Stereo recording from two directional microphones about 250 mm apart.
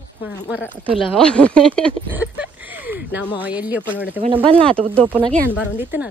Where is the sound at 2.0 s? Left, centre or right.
Centre.